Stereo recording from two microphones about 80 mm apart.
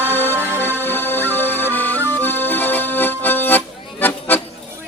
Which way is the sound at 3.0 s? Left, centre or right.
Left.